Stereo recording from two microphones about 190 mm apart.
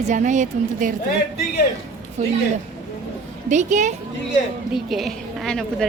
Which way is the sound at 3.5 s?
40° right (ahead or behind).